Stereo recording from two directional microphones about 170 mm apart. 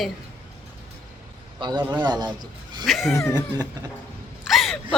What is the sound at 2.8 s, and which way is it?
Speech, centre (ahead or behind).